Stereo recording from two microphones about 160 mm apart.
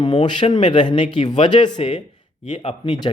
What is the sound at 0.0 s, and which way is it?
Speech, 30° left (ahead or behind).